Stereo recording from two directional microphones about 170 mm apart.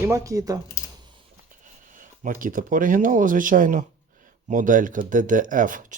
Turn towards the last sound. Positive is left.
turn(degrees=-50)  # may be behind; listen again after turning